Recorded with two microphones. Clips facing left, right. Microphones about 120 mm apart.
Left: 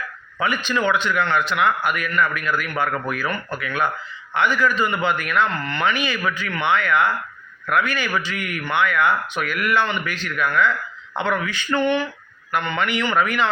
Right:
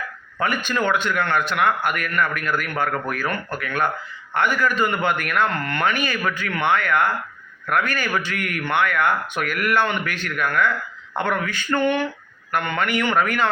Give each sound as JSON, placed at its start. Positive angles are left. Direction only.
{"t": 0.4, "sound": "a man's voice", "side_deg": -50}